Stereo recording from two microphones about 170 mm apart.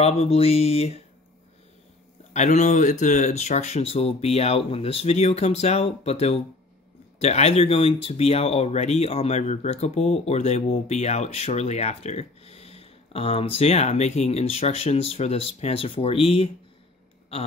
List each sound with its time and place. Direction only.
0.0 s speech: 35° left (ahead or behind)
2.3 s speech: 45° left (ahead or behind)